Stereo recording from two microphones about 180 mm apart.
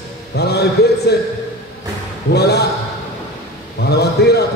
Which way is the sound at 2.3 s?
65° left (ahead or behind).